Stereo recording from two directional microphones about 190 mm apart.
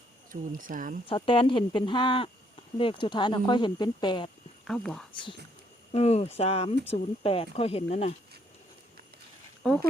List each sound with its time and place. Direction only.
0.3 s speech: 45° right (ahead or behind)
1.0 s speech: 25° left (ahead or behind)
4.6 s speech: 5° left (ahead or behind)
5.1 s speech: 25° left (ahead or behind)
9.6 s speech: 5° left (ahead or behind)